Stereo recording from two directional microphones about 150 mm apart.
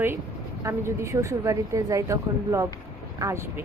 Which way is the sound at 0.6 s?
20° right (ahead or behind).